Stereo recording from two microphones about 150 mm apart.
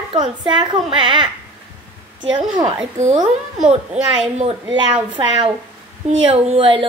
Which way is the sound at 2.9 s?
55° right (ahead or behind).